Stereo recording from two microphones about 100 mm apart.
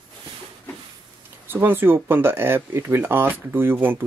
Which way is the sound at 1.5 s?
20° right (ahead or behind).